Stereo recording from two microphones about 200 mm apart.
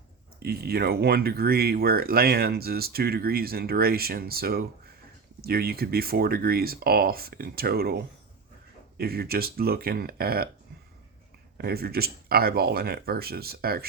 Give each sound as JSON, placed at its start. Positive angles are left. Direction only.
{"t": 0.4, "sound": "speech", "side_deg": -50}
{"t": 11.5, "sound": "speech", "side_deg": -50}